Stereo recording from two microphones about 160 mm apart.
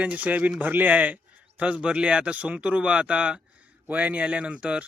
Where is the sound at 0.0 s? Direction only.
10° right (ahead or behind).